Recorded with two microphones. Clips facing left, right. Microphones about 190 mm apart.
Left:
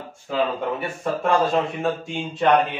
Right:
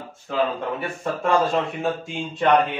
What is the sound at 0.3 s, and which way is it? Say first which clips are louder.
A man's voice: even; centre (ahead or behind).